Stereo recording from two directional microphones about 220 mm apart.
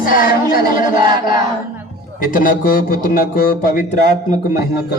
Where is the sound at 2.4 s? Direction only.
40° left (ahead or behind).